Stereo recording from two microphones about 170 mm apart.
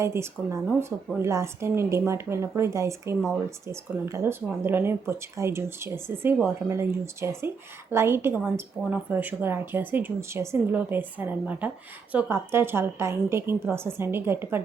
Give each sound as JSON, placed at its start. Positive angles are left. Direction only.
{"t": 0.0, "sound": "speech", "side_deg": -15}